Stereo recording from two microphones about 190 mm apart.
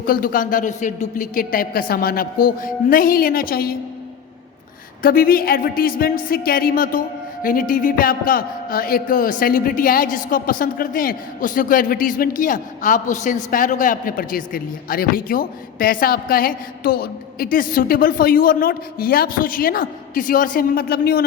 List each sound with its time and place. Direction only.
0.0 s a man's voice: 50° left (ahead or behind)
5.0 s a man's voice: 50° left (ahead or behind)